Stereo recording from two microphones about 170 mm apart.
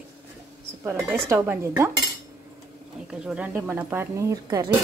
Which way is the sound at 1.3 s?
15° right (ahead or behind).